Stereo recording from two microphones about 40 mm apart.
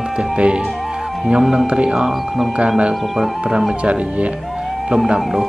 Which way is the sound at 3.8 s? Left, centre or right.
Right.